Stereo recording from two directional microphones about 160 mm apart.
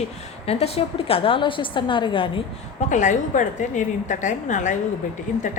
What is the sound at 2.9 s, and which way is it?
A woman's voice, 50° left (ahead or behind).